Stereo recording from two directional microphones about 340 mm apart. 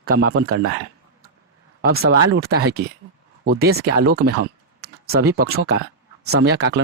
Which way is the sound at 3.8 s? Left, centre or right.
Right.